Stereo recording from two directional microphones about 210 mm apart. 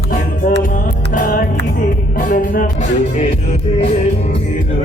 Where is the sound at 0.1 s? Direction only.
40° left (ahead or behind).